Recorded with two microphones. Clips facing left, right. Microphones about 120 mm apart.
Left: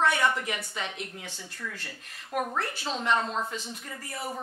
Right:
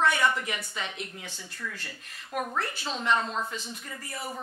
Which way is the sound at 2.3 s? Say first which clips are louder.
Left 1 dB; 55° left (ahead or behind).